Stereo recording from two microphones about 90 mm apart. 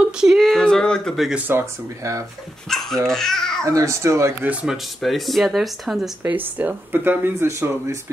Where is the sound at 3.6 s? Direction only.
35° right (ahead or behind).